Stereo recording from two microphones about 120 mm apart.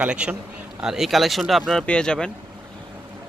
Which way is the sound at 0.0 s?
10° right (ahead or behind).